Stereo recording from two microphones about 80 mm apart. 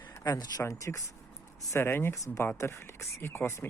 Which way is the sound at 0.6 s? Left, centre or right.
Left.